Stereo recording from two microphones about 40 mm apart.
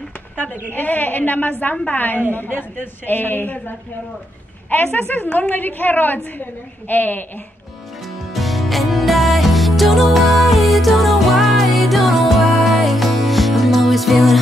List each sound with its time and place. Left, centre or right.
0.7 s a woman's voice: left
8.0 s music: centre